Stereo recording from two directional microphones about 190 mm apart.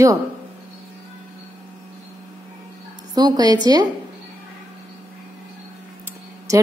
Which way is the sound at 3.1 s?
20° right (ahead or behind).